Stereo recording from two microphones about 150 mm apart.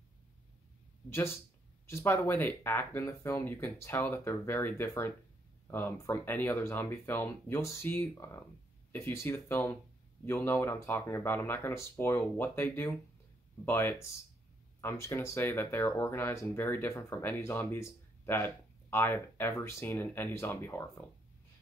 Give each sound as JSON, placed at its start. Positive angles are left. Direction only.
{"t": 1.1, "sound": "speech", "side_deg": 15}